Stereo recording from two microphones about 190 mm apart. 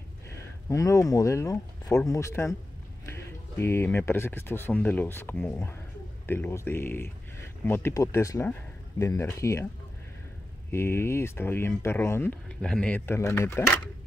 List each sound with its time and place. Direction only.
0.7 s speech: 15° left (ahead or behind)
10.7 s speech: 15° left (ahead or behind)